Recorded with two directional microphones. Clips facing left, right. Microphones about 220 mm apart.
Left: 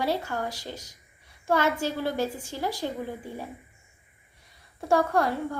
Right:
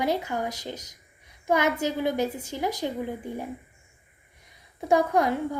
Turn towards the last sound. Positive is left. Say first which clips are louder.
# right 2 dB
turn(degrees=-20)  # may be behind; listen again after turning